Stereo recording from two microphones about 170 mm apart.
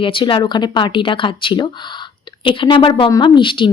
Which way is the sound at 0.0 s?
30° left (ahead or behind).